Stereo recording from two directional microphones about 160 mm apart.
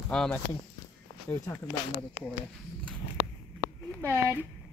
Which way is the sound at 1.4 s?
25° left (ahead or behind).